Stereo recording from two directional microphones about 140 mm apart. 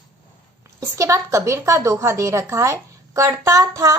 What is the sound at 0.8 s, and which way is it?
Speech, 20° right (ahead or behind).